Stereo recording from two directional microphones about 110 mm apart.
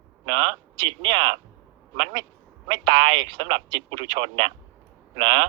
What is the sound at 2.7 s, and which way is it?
Speech, 45° right (ahead or behind).